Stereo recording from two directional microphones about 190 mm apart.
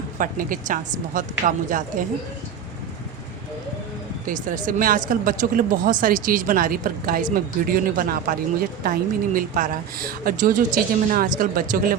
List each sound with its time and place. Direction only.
0.2 s speech: 45° right (ahead or behind)
4.3 s speech: 45° right (ahead or behind)